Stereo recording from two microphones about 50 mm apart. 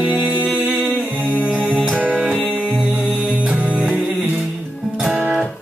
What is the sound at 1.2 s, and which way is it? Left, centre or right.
Music, right.